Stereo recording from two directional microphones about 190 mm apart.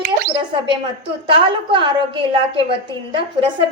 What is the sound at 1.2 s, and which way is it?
A woman's voice, 25° right (ahead or behind).